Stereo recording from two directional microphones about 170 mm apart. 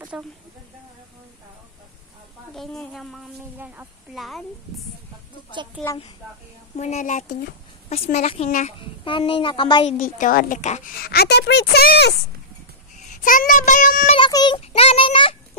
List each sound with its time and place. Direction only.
0.1 s speech: 5° right (ahead or behind)
2.5 s speech: centre (ahead or behind)
3.5 s speech: 10° right (ahead or behind)
6.8 s a woman's voice: 45° left (ahead or behind)
8.7 s speech: 30° left (ahead or behind)
9.8 s speech: 50° left (ahead or behind)
11.0 s a woman's voice: 70° left (ahead or behind)
13.1 s speech: 55° left (ahead or behind)
14.1 s speech: 25° left (ahead or behind)
14.6 s a woman's voice: 35° left (ahead or behind)